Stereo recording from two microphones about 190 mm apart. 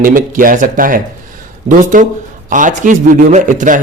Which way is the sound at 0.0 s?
45° right (ahead or behind).